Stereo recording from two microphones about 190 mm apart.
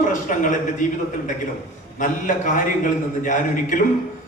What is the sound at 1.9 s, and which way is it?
A man's voice, 45° left (ahead or behind).